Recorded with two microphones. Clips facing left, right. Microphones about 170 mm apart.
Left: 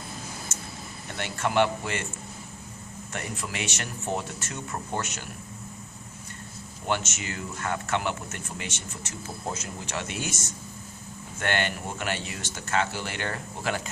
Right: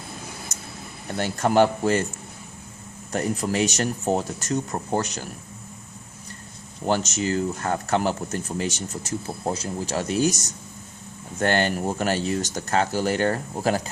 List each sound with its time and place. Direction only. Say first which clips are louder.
0.5 s a sound: even; 40° right (ahead or behind)
1.1 s speech: right 6 dB; 40° right (ahead or behind)
3.1 s speech: right 11 dB; 40° right (ahead or behind)
6.8 s speech: right 7 dB; 35° right (ahead or behind)